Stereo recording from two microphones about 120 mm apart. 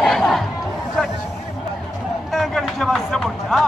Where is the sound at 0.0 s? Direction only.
Centre (ahead or behind).